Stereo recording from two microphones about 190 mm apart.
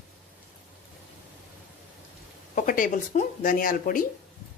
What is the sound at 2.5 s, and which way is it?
Speech, 45° left (ahead or behind).